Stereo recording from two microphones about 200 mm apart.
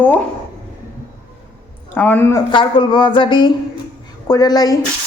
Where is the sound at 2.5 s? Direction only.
25° left (ahead or behind).